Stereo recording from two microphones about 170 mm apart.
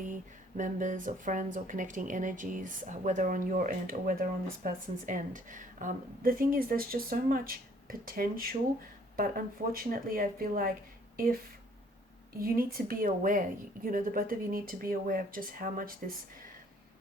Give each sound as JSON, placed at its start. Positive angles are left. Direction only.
{"t": 0.0, "sound": "a woman's voice", "side_deg": -50}
{"t": 12.4, "sound": "a woman's voice", "side_deg": -60}